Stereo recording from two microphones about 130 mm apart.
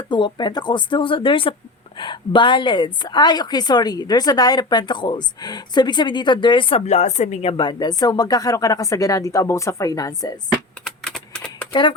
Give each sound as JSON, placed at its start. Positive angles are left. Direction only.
{"t": 0.1, "sound": "a woman's voice", "side_deg": 35}
{"t": 6.8, "sound": "a woman's voice", "side_deg": 60}
{"t": 7.5, "sound": "speech", "side_deg": 35}
{"t": 10.5, "sound": "typing", "side_deg": 0}
{"t": 11.7, "sound": "speech", "side_deg": 40}